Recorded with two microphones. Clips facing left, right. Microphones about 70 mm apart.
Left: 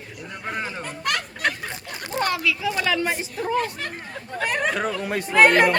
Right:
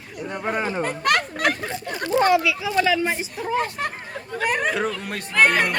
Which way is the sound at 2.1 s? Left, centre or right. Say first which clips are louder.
Right 6 dB; centre.